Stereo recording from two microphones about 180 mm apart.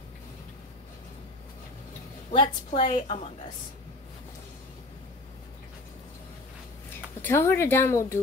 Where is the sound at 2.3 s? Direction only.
30° left (ahead or behind).